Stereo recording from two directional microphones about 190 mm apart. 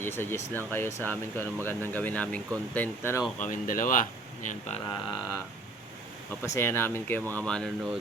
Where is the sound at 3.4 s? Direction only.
45° left (ahead or behind).